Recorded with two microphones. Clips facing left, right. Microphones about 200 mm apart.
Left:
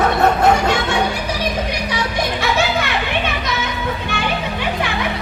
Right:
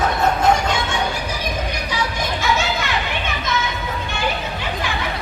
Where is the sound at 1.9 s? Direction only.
65° left (ahead or behind).